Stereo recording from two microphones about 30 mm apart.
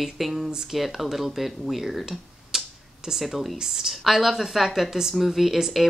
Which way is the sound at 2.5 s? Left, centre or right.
Centre.